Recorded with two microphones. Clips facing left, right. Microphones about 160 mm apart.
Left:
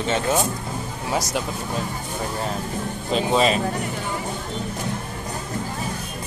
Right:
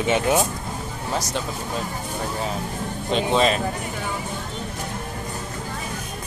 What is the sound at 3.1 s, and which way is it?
Speech, 5° left (ahead or behind).